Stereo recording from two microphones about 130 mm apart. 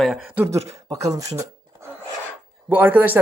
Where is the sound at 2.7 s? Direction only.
15° right (ahead or behind).